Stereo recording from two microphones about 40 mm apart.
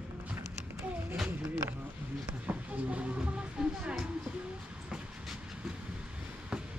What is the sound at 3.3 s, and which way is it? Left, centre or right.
Music, right.